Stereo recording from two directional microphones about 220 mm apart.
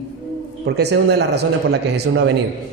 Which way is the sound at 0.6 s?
50° right (ahead or behind).